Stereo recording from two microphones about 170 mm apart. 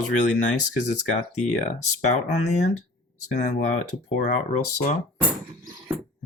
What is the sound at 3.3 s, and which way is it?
Speech, 45° left (ahead or behind).